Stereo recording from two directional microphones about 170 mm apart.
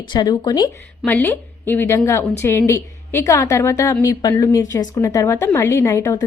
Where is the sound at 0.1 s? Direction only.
25° left (ahead or behind).